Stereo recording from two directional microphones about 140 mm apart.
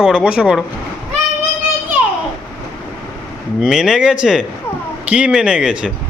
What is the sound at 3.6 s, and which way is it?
Speech, 5° right (ahead or behind).